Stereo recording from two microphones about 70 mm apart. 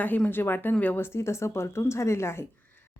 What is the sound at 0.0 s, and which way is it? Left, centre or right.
Speech, left.